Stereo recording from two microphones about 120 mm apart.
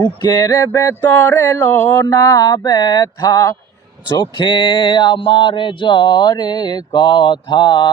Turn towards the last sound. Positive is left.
turn(degrees=35)  # may be behind; listen again after turning